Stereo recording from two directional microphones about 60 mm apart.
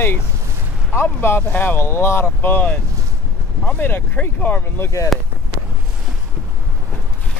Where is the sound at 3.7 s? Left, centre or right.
Left.